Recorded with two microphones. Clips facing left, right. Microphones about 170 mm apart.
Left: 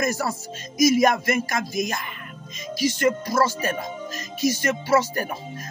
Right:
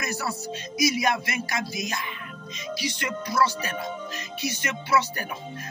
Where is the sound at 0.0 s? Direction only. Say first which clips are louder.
Left 6 dB; 45° left (ahead or behind).